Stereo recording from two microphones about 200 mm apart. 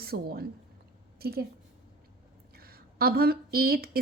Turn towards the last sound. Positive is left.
turn(degrees=-50)  # may be behind; listen again after turning